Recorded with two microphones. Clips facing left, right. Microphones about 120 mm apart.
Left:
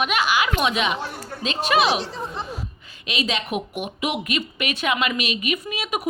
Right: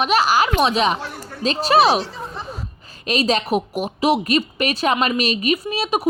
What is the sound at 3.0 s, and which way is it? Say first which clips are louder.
Speech: right 7 dB; 40° right (ahead or behind).